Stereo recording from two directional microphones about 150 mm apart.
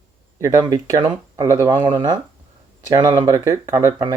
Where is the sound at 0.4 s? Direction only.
20° right (ahead or behind).